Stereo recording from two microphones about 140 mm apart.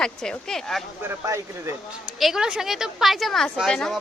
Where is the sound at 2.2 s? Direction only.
5° right (ahead or behind).